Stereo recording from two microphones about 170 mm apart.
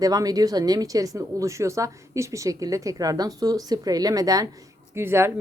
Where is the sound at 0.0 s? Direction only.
20° right (ahead or behind).